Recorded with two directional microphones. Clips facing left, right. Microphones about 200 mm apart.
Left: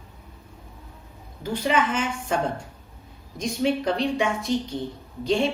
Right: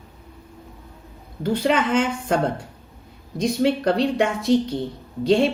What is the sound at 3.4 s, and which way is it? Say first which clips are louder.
Speech: right 4 dB; 65° right (ahead or behind).